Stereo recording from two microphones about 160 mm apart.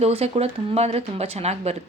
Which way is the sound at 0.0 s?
40° right (ahead or behind).